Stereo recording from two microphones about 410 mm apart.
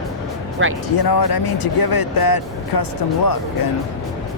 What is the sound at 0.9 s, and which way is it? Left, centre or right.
Speech, left.